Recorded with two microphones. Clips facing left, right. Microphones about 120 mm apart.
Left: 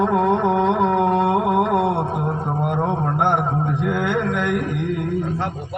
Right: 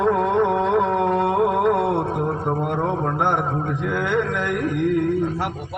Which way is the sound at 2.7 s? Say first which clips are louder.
Left 1 dB; 20° left (ahead or behind).